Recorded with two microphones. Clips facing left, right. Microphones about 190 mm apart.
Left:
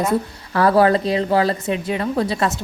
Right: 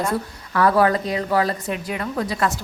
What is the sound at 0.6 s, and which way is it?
A woman's voice, 30° left (ahead or behind).